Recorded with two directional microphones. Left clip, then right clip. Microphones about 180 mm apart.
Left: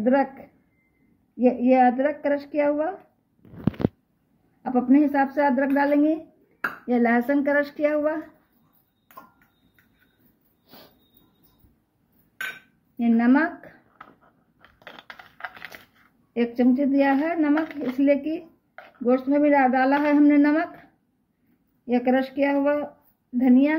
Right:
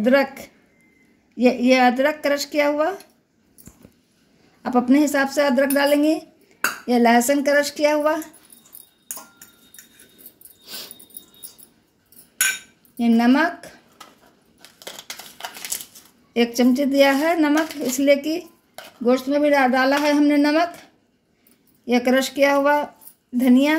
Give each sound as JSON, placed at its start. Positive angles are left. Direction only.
{"t": 0.0, "sound": "a woman's voice", "side_deg": -45}
{"t": 1.4, "sound": "a woman's voice", "side_deg": -45}
{"t": 4.6, "sound": "a woman's voice", "side_deg": -40}
{"t": 12.9, "sound": "speech", "side_deg": -25}
{"t": 16.3, "sound": "a woman's voice", "side_deg": -40}
{"t": 19.0, "sound": "speech", "side_deg": -30}
{"t": 21.8, "sound": "a woman's voice", "side_deg": -40}